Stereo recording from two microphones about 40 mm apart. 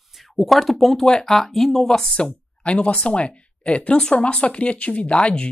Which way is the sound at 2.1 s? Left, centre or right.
Left.